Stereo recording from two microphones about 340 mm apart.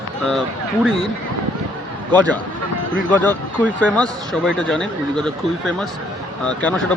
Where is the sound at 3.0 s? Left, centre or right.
Centre.